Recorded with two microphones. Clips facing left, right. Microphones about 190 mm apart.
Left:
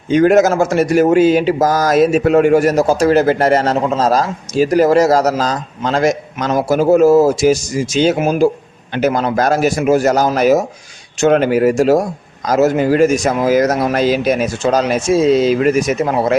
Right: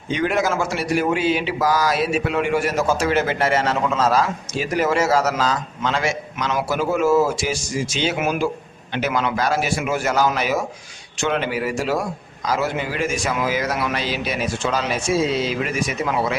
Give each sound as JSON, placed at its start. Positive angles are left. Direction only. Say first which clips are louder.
{"t": 0.1, "sound": "a man's voice", "louder": "left 10 dB", "side_deg": 45}